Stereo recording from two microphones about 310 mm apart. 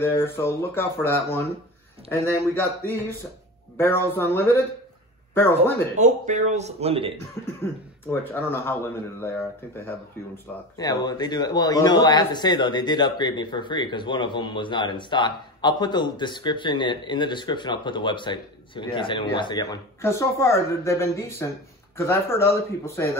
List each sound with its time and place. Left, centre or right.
0.0 s speech: centre
3.7 s speech: centre
5.9 s speech: right
7.4 s cough: centre
8.1 s speech: centre